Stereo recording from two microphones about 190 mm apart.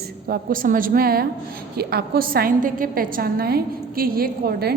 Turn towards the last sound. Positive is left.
turn(degrees=-55)  # may be behind; listen again after turning